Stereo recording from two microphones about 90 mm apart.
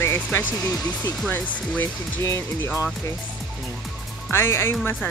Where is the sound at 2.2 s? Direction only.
30° left (ahead or behind).